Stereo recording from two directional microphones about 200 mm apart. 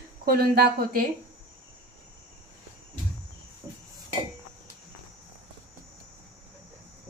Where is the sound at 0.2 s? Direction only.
45° right (ahead or behind).